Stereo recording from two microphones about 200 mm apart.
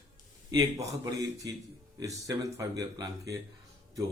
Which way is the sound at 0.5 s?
15° right (ahead or behind).